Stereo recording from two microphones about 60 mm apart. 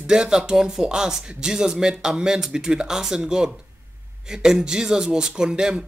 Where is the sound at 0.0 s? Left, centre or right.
Centre.